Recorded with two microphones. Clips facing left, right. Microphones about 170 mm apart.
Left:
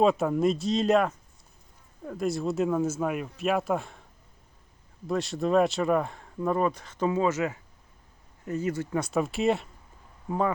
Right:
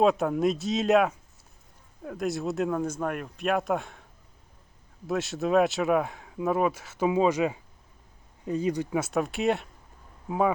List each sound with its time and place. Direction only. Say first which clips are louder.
0.0 s speech: even; centre (ahead or behind)
5.0 s speech: even; centre (ahead or behind)
9.0 s speech: even; centre (ahead or behind)